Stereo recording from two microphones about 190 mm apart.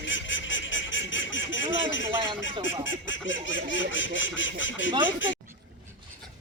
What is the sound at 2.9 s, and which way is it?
Goose, 80° left.